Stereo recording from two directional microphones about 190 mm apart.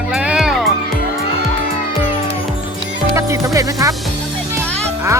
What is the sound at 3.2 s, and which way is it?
Speech, 15° right (ahead or behind).